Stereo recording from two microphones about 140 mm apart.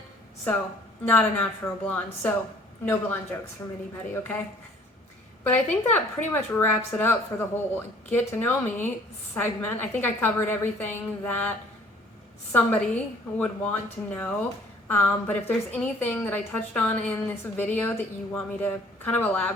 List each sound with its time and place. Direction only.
1.0 s a woman's voice: 10° left (ahead or behind)
5.4 s speech: 10° left (ahead or behind)